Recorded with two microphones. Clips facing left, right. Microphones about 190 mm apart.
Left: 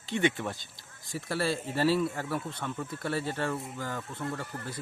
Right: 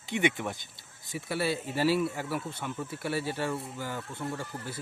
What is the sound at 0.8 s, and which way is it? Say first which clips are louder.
Speech: even; centre (ahead or behind).